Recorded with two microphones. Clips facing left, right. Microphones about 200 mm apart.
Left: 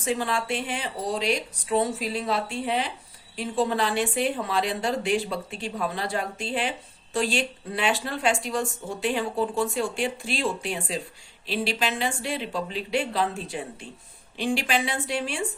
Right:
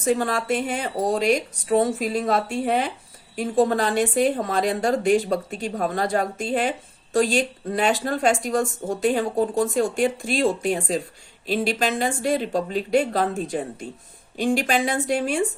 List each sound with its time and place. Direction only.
0.0 s a woman's voice: 45° right (ahead or behind)